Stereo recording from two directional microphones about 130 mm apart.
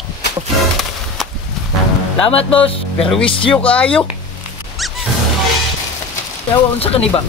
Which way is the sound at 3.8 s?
10° left (ahead or behind).